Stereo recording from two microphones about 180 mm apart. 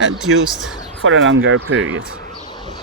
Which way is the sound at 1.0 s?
90° right.